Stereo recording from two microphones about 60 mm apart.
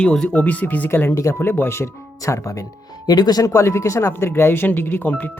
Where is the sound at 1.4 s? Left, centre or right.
Left.